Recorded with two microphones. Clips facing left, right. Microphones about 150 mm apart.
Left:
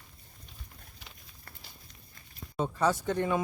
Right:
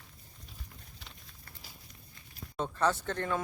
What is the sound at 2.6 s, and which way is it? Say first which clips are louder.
Speech: left 2 dB; 10° left (ahead or behind).